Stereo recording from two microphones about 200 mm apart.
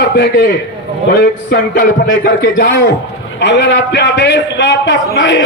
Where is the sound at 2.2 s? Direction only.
45° left (ahead or behind).